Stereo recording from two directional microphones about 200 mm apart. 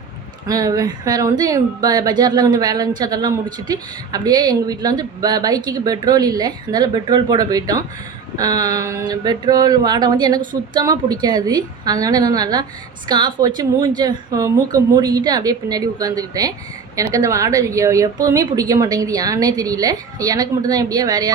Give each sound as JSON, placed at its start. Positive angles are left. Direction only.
{"t": 0.4, "sound": "speech", "side_deg": -20}